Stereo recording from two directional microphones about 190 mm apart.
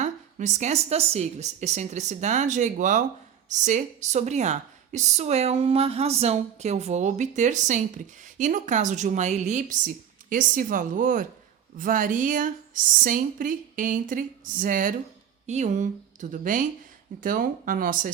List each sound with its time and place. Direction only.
0.0 s speech: 40° right (ahead or behind)